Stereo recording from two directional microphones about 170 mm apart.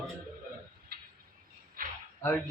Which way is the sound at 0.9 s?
60° right (ahead or behind).